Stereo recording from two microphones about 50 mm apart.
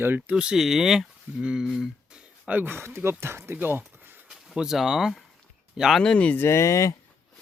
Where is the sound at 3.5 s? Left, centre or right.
Right.